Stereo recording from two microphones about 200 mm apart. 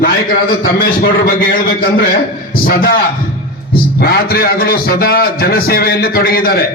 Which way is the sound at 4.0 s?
50° left (ahead or behind).